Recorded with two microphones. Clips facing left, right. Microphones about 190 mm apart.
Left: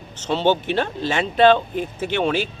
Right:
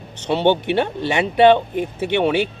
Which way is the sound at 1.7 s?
60° right (ahead or behind).